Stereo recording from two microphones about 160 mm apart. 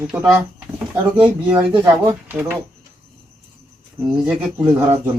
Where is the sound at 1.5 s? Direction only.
30° right (ahead or behind).